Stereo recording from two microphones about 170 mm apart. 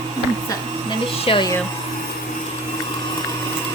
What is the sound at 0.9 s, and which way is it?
Speech, 30° left (ahead or behind).